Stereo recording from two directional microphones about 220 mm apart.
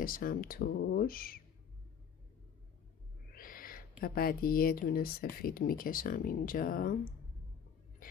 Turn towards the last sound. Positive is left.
turn(degrees=40)  # may be behind; listen again after turning